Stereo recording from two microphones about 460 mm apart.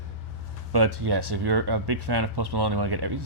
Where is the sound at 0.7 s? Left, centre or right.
Right.